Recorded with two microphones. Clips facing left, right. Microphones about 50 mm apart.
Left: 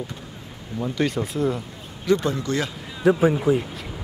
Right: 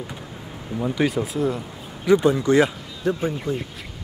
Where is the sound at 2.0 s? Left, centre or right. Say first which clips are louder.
Right 5 dB; centre.